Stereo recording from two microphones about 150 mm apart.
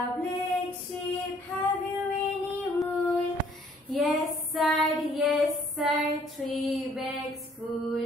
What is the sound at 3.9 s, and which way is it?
Child singing, centre (ahead or behind).